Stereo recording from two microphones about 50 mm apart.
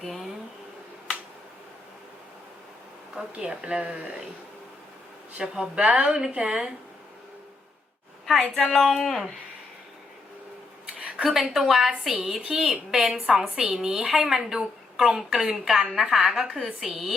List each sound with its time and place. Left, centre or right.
0.0 s speech: centre
3.3 s a woman's voice: centre
5.4 s a woman's voice: centre
5.8 s a woman's voice: right
8.5 s speech: centre
11.2 s a woman's voice: centre